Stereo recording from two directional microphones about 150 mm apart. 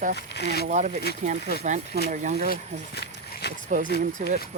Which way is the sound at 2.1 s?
60° right (ahead or behind).